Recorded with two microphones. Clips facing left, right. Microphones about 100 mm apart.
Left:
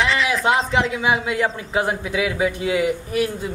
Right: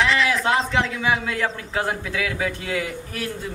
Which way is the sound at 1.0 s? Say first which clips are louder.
Left 3 dB; 15° left (ahead or behind).